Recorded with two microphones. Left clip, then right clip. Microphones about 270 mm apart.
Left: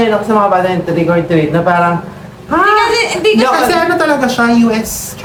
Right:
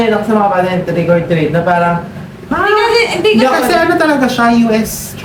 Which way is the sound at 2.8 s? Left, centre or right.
Centre.